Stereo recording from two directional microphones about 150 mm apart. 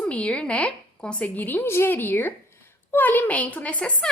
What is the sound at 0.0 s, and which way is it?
A woman's voice, 5° left (ahead or behind).